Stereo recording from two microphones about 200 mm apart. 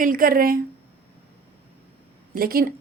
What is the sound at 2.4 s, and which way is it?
Speech, 45° right (ahead or behind).